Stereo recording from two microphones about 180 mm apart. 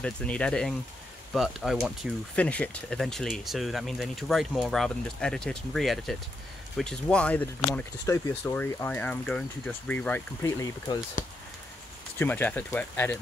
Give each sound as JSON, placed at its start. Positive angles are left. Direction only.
{"t": 0.0, "sound": "speech", "side_deg": 5}
{"t": 11.2, "sound": "speech", "side_deg": 45}
{"t": 12.2, "sound": "speech", "side_deg": 10}